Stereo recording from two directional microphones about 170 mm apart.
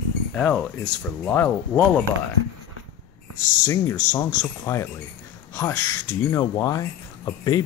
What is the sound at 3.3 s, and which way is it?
Speech, 50° left (ahead or behind).